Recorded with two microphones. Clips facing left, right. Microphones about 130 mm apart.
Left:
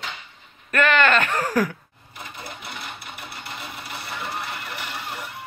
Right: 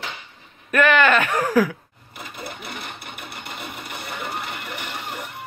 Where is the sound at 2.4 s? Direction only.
55° right (ahead or behind).